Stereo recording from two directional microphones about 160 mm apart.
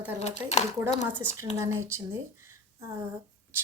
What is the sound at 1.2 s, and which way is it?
Speech, 15° right (ahead or behind).